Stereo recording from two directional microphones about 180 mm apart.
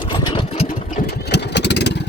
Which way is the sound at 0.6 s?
45° left (ahead or behind).